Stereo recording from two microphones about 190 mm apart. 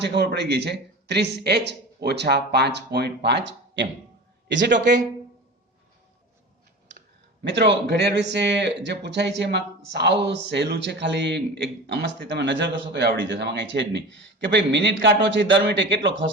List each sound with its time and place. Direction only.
0.0 s a man's voice: 60° right (ahead or behind)
7.4 s a man's voice: 65° right (ahead or behind)